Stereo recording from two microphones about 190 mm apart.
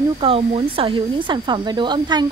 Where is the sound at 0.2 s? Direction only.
30° right (ahead or behind).